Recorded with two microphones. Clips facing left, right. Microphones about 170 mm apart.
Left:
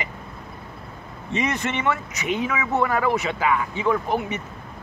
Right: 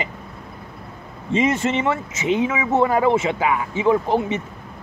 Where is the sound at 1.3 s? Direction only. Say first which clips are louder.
Right 6 dB; 25° right (ahead or behind).